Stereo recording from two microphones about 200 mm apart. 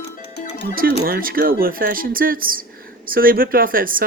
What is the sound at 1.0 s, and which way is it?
Speech, 45° right (ahead or behind).